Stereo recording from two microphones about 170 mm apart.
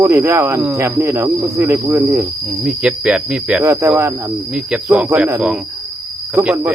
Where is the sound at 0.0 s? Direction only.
15° right (ahead or behind).